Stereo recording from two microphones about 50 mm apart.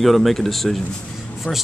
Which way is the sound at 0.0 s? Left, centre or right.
Centre.